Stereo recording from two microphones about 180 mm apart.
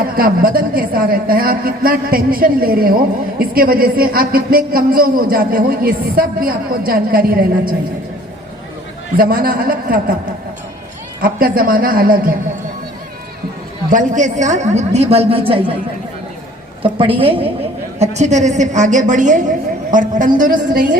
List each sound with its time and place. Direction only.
0.0 s a woman's voice: 55° right (ahead or behind)
9.1 s a woman's voice: 55° right (ahead or behind)
11.2 s a woman's voice: 55° right (ahead or behind)
13.9 s a woman's voice: 45° right (ahead or behind)
16.8 s a woman's voice: 30° right (ahead or behind); by 20.8 s 50° right (ahead or behind)